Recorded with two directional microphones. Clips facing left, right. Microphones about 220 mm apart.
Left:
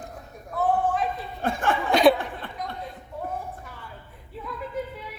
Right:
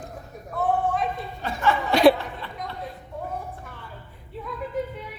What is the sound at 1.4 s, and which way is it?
Laughter, 50° left (ahead or behind).